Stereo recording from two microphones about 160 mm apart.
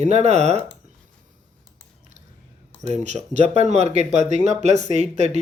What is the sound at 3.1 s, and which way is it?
Speech, 45° right (ahead or behind).